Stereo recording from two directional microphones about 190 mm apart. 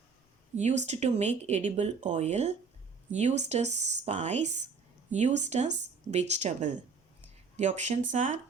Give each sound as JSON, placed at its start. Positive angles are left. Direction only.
{"t": 0.5, "sound": "speech", "side_deg": -35}